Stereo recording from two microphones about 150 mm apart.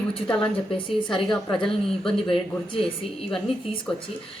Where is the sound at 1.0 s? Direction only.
30° left (ahead or behind).